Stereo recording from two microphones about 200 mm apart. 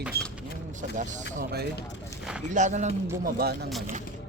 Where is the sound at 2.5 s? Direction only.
35° right (ahead or behind).